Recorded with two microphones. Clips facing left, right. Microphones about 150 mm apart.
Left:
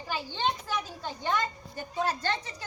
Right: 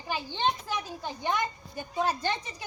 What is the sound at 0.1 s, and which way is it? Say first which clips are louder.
A woman's voice: right 1 dB; 15° right (ahead or behind).